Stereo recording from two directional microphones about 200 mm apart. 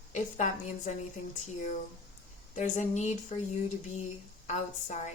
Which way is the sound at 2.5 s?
35° left (ahead or behind).